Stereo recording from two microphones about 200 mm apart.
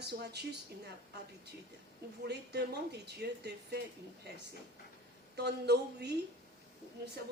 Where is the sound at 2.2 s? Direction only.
55° right (ahead or behind).